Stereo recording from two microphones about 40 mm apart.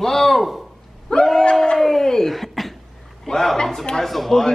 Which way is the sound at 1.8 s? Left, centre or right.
Centre.